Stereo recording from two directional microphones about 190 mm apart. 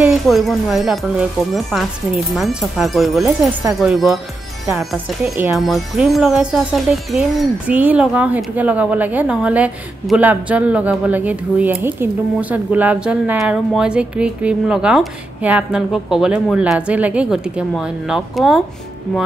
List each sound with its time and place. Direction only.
0.0 s speech: centre (ahead or behind)